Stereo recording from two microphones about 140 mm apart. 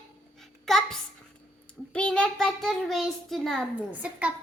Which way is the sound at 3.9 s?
10° right (ahead or behind).